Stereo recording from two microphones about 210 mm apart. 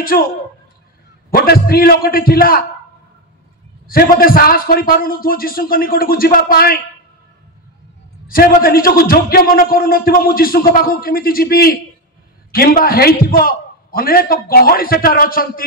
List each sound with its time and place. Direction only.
0.1 s a man's voice: 45° left (ahead or behind)
1.3 s a man's voice: 45° left (ahead or behind)
3.8 s a man's voice: 45° left (ahead or behind)
8.3 s a man's voice: 45° left (ahead or behind)